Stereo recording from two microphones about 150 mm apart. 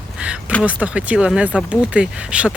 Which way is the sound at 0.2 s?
10° right (ahead or behind).